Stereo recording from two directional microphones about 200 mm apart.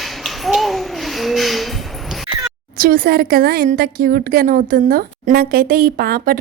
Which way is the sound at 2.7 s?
45° right (ahead or behind).